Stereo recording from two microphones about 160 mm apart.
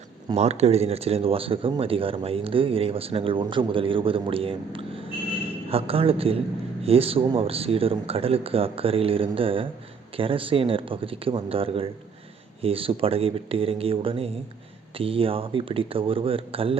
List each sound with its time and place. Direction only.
0.3 s speech: 40° right (ahead or behind)